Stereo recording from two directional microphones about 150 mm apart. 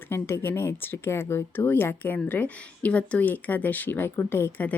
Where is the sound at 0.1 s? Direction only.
15° left (ahead or behind).